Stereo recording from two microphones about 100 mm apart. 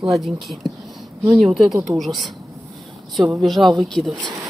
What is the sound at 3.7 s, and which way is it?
Speech, centre (ahead or behind).